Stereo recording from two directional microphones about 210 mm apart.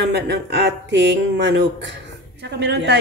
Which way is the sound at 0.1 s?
55° right (ahead or behind).